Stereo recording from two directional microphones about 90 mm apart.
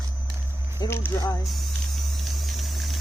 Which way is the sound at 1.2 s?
35° left (ahead or behind).